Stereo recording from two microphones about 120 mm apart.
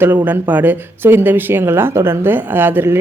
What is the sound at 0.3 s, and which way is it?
Speech, 15° right (ahead or behind).